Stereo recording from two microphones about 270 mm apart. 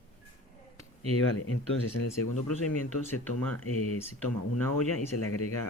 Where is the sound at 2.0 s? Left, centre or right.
Left.